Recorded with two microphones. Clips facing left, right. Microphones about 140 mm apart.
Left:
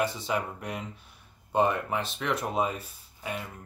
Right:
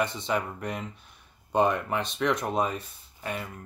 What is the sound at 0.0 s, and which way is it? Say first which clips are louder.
Speech: right 1 dB; 5° left (ahead or behind).